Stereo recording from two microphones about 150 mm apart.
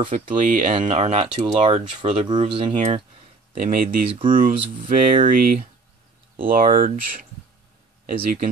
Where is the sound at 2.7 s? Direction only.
45° right (ahead or behind).